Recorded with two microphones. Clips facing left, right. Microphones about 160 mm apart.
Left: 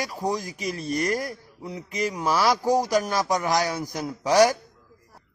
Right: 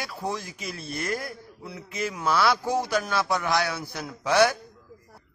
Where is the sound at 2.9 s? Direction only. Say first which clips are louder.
Left 3 dB; 40° left (ahead or behind).